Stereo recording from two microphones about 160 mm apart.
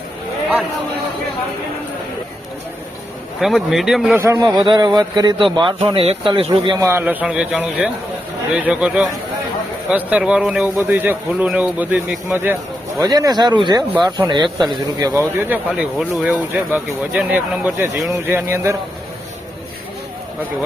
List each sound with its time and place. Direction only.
3.4 s speech: centre (ahead or behind)
4.1 s speech: 20° right (ahead or behind)
4.5 s a man's voice: 30° right (ahead or behind)
6.7 s speech: 15° right (ahead or behind)
13.0 s speech: 25° right (ahead or behind)
15.4 s speech: 10° right (ahead or behind)